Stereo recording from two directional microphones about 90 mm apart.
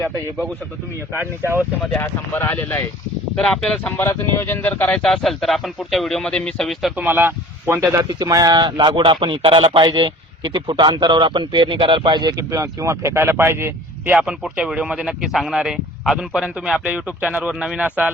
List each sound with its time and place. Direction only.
1.1 s speech: 25° right (ahead or behind)
2.0 s speech: 25° left (ahead or behind)
3.3 s speech: 5° left (ahead or behind)
3.9 s speech: 30° left (ahead or behind); by 6.9 s 5° left (ahead or behind)
6.9 s speech: 20° right (ahead or behind)
7.8 s a man's voice: 40° right (ahead or behind); by 12.3 s 60° right (ahead or behind)
12.4 s speech: 35° right (ahead or behind)
14.2 s speech: 15° right (ahead or behind)